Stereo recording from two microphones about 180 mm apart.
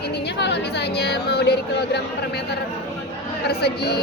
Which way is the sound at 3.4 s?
65° left (ahead or behind).